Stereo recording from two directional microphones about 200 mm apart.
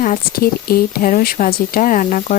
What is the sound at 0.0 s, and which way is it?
Speech, 45° left (ahead or behind).